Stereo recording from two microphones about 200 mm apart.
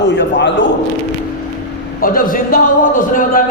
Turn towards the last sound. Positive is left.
turn(degrees=40)  # may be behind; listen again after turning